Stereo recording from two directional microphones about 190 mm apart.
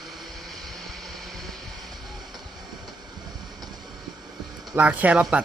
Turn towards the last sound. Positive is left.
turn(degrees=-5)  # may be behind; listen again after turning